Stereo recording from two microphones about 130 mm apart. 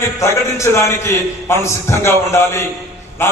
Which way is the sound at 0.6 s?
20° left (ahead or behind).